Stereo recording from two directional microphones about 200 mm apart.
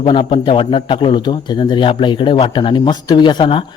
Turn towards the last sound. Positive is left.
turn(degrees=25)  # may be behind; listen again after turning